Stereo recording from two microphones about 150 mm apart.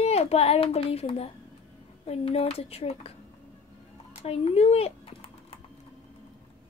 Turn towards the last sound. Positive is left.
turn(degrees=40)  # may be behind; listen again after turning